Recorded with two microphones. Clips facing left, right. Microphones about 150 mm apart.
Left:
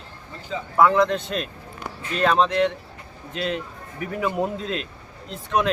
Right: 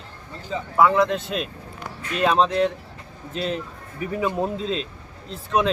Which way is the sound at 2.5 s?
35° right (ahead or behind).